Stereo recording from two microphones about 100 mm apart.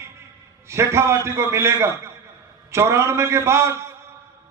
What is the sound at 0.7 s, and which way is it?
A man's voice, 25° right (ahead or behind).